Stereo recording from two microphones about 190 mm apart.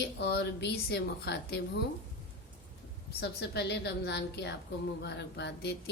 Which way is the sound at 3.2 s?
60° left (ahead or behind).